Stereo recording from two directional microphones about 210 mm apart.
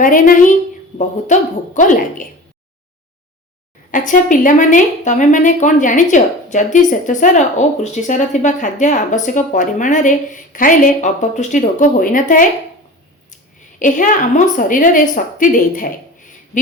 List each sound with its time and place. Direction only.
0.0 s a woman's voice: 40° left (ahead or behind)
3.9 s a woman's voice: 40° left (ahead or behind)
13.7 s a woman's voice: 40° left (ahead or behind)